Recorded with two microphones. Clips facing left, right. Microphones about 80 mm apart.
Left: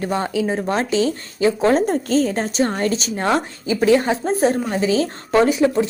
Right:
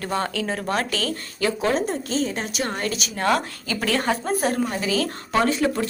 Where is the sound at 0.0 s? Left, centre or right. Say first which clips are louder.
Left 4 dB; centre.